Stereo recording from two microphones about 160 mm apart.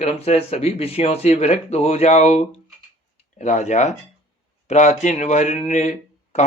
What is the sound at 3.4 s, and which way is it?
A man's voice, 50° left (ahead or behind).